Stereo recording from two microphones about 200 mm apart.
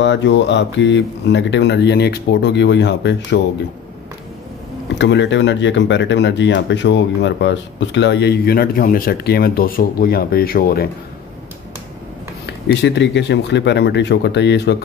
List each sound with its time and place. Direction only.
0.0 s speech: 65° left (ahead or behind)
4.9 s speech: 65° left (ahead or behind)
12.4 s speech: 60° left (ahead or behind)